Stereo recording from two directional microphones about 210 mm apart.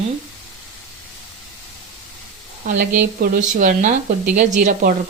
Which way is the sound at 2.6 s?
40° right (ahead or behind).